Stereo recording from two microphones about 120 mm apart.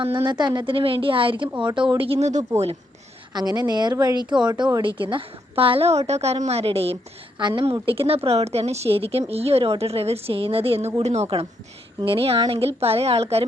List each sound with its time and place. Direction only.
0.0 s a woman's voice: 40° right (ahead or behind); by 2.4 s 65° right (ahead or behind)
3.3 s a woman's voice: 35° right (ahead or behind); by 7.0 s 55° right (ahead or behind)
7.3 s a woman's voice: 40° right (ahead or behind)
7.6 s a woman's voice: 50° right (ahead or behind)
11.9 s a woman's voice: 45° right (ahead or behind)